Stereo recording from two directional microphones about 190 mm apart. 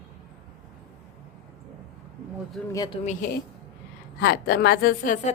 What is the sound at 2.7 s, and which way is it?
Speech, 20° left (ahead or behind).